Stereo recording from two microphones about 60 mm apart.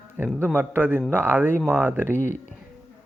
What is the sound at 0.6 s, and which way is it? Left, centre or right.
Speech, right.